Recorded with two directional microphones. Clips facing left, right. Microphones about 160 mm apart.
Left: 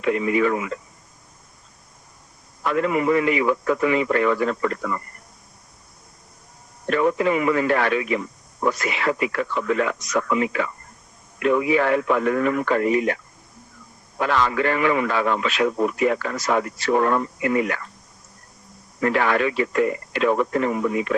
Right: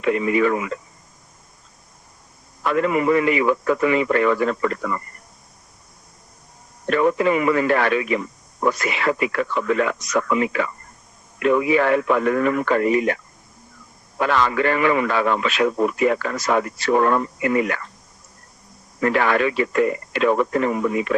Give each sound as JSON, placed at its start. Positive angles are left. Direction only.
{"t": 0.0, "sound": "a man's voice", "side_deg": -70}
{"t": 2.6, "sound": "a man's voice", "side_deg": -70}
{"t": 6.9, "sound": "a man's voice", "side_deg": -70}
{"t": 14.2, "sound": "a man's voice", "side_deg": -65}
{"t": 19.0, "sound": "a man's voice", "side_deg": -70}